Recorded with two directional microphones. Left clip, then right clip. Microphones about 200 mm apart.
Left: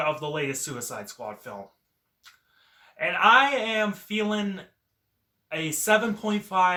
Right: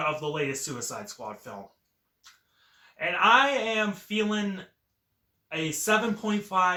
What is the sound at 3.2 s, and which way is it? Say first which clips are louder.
Speech: left 2 dB; 15° left (ahead or behind).